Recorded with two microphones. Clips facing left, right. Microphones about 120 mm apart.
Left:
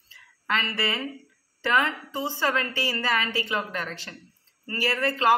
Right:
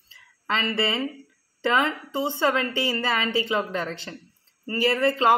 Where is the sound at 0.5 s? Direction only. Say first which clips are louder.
Right 3 dB; 25° right (ahead or behind).